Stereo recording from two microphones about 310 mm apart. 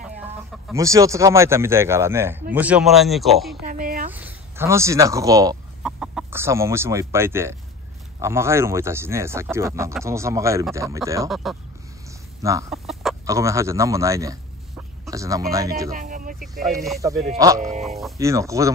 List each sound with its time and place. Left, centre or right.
0.7 s speech: centre
3.6 s a sound: right
4.1 s speech: centre
15.9 s music: right
16.6 s speech: centre
17.0 s speech: centre
17.6 s speech: right
17.8 s speech: centre